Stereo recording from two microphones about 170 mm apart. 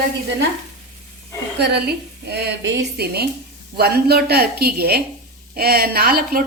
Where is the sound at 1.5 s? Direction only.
80° right.